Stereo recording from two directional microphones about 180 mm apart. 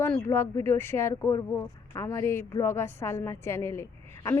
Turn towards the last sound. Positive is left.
turn(degrees=15)  # may be behind; listen again after turning